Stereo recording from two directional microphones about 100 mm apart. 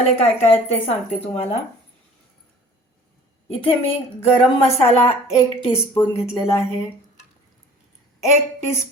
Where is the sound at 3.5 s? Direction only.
70° left (ahead or behind); by 5.1 s 85° left.